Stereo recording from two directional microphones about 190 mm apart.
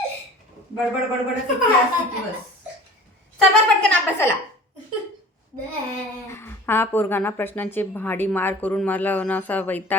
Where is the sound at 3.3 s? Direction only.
5° left (ahead or behind).